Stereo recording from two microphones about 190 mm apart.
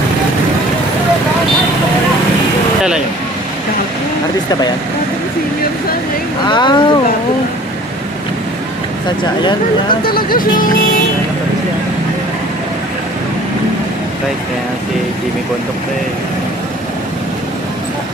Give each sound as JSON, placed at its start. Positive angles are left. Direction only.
{"t": 6.5, "sound": "speech", "side_deg": 25}
{"t": 10.1, "sound": "speech", "side_deg": 50}